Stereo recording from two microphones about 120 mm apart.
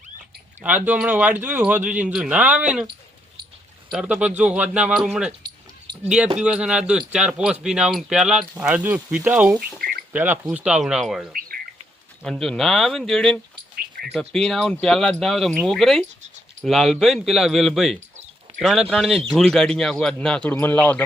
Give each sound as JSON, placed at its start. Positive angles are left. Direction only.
{"t": 0.6, "sound": "speech", "side_deg": -15}
{"t": 4.0, "sound": "speech", "side_deg": -10}